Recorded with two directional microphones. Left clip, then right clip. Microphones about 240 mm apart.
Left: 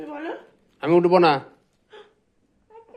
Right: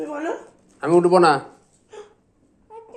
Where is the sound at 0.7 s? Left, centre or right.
Left.